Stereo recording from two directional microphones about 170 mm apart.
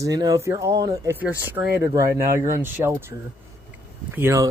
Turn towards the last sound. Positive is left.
turn(degrees=-15)  # may be behind; listen again after turning